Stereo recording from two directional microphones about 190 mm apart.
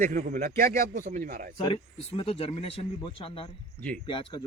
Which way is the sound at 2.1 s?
30° left (ahead or behind).